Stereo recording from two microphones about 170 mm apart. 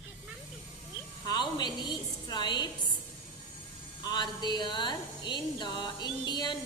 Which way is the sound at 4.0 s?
25° left (ahead or behind).